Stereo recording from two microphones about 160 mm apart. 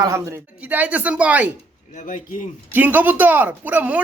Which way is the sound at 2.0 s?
50° left (ahead or behind).